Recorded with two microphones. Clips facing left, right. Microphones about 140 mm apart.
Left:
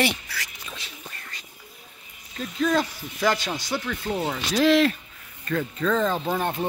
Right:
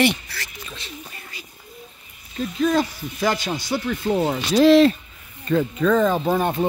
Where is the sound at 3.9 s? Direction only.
25° right (ahead or behind).